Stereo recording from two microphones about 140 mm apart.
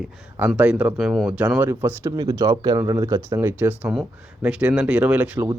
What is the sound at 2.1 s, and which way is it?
Speech, 30° right (ahead or behind).